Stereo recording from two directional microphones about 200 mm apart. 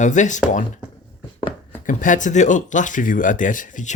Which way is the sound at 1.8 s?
40° left (ahead or behind).